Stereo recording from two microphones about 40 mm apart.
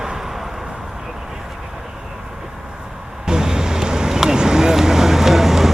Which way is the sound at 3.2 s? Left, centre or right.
Centre.